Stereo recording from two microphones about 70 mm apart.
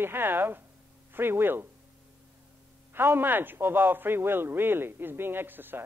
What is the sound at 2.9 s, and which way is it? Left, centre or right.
A man's voice, right.